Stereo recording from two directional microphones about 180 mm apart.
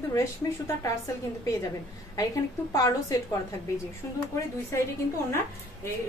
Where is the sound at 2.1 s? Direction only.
20° left (ahead or behind).